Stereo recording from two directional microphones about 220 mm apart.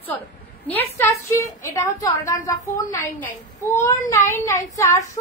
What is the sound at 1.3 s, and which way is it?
A woman's voice, 10° left (ahead or behind).